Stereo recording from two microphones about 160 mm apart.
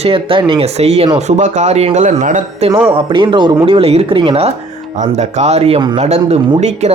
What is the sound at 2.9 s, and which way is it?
Speech, 30° right (ahead or behind).